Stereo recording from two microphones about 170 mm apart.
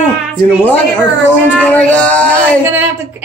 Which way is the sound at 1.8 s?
5° left (ahead or behind).